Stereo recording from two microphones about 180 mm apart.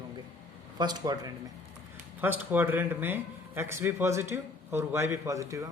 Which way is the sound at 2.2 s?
10° right (ahead or behind).